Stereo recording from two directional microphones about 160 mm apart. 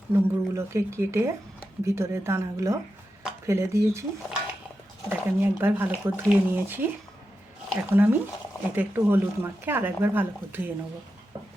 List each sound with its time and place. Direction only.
0.1 s speech: 15° right (ahead or behind)
5.0 s speech: 10° right (ahead or behind)
7.9 s speech: 10° right (ahead or behind)